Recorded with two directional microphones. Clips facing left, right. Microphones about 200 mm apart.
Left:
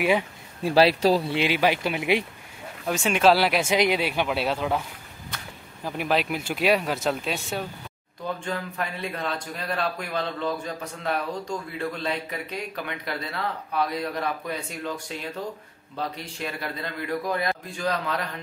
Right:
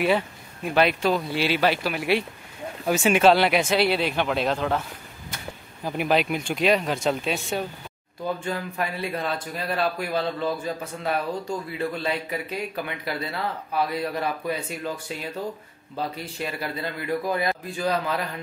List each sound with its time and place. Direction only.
0.6 s speech: 30° left (ahead or behind)
2.9 s speech: 5° right (ahead or behind)
3.7 s speech: 15° left (ahead or behind)
5.9 s speech: centre (ahead or behind)
16.0 s speech: 5° right (ahead or behind)